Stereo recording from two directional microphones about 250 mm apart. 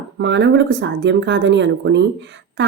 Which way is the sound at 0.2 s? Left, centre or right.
Right.